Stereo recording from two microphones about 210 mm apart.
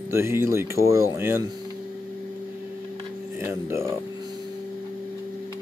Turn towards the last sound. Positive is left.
turn(degrees=-10)  # may be behind; listen again after turning